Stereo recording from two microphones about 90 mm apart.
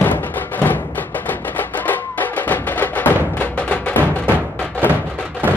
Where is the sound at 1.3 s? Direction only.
20° left (ahead or behind).